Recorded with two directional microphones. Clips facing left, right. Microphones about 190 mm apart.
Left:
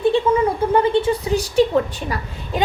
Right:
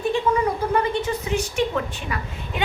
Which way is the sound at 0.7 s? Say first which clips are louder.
Left 6 dB; 30° left (ahead or behind).